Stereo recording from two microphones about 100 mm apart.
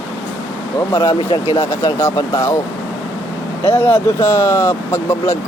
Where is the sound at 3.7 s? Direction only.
20° left (ahead or behind).